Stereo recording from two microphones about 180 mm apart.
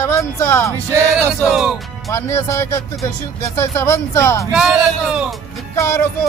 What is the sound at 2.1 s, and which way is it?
Speech, 15° left (ahead or behind).